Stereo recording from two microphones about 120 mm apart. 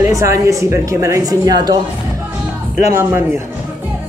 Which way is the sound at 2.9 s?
20° right (ahead or behind).